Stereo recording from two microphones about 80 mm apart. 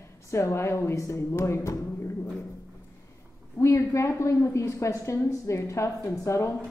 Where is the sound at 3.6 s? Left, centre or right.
Left.